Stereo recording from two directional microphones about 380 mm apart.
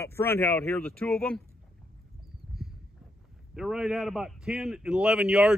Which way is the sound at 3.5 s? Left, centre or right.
Centre.